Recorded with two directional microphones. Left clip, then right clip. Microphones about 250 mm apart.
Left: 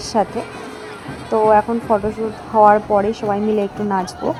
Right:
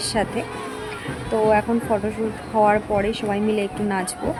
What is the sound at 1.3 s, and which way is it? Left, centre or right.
A woman's voice, centre.